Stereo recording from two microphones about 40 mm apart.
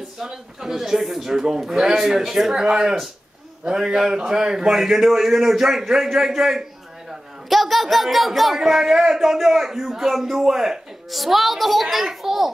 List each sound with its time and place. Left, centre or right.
0.2 s a man's voice: centre